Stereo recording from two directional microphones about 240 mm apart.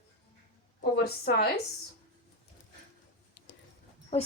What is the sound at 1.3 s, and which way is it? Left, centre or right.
Speech, left.